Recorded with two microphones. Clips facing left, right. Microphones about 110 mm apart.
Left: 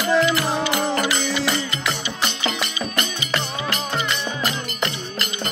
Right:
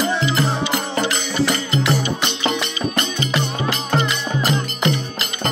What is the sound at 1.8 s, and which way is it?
Music, 5° right (ahead or behind).